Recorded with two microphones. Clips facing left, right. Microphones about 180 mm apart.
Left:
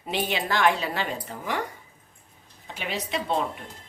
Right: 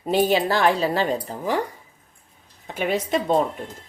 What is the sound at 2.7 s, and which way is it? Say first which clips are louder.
Speech: right 8 dB; 50° right (ahead or behind).